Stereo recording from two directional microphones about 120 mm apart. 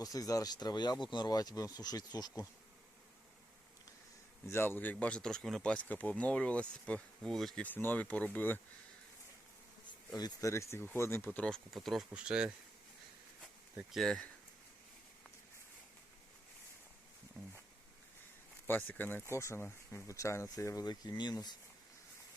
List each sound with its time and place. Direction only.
0.0 s speech: 30° left (ahead or behind)
4.4 s speech: 20° left (ahead or behind)
10.1 s speech: 30° left (ahead or behind)
11.3 s speech: 5° left (ahead or behind); by 12.5 s 10° right (ahead or behind)
13.9 s speech: 5° left (ahead or behind)
17.4 s a sound: 5° left (ahead or behind)
18.7 s speech: 15° left (ahead or behind); by 21.6 s 35° left (ahead or behind)